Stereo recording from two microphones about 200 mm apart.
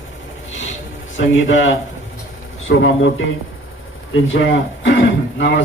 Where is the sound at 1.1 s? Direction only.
70° left (ahead or behind).